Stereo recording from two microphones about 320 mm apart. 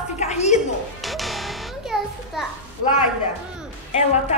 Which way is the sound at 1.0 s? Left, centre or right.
Centre.